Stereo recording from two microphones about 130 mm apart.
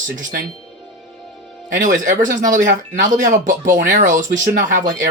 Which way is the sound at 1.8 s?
80° right.